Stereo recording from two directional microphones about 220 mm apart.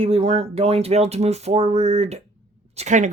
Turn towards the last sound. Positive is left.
turn(degrees=-30)  # may be behind; listen again after turning